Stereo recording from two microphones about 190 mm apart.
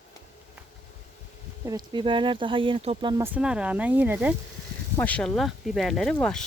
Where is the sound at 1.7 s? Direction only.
20° right (ahead or behind).